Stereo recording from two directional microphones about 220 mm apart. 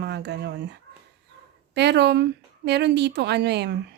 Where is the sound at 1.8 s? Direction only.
50° right (ahead or behind).